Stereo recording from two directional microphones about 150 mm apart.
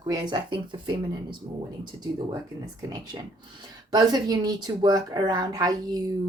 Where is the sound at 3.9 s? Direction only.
25° right (ahead or behind).